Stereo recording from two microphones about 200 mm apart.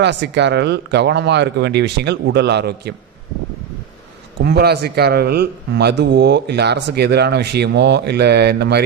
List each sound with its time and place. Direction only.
0.0 s a man's voice: 60° right (ahead or behind)
4.4 s a man's voice: 55° right (ahead or behind)